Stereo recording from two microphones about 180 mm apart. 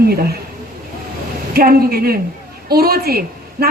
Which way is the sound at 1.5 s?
55° right (ahead or behind).